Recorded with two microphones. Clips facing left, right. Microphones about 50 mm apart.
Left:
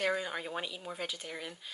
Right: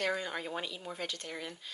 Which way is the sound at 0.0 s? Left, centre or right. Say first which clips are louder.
Left 1 dB; centre.